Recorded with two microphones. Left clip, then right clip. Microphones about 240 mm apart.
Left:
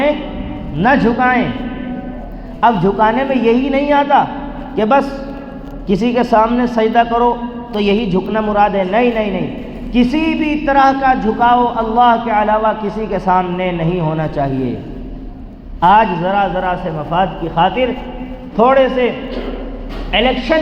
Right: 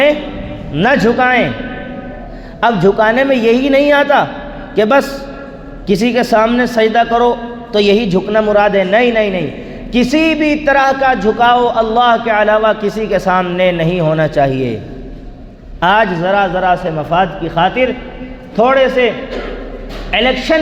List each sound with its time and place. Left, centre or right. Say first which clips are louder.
0.8 s a man's voice: right 2 dB; right
2.6 s a man's voice: right 1 dB; right
5.9 s a man's voice: right 1 dB; right
15.8 s a man's voice: left 1 dB; right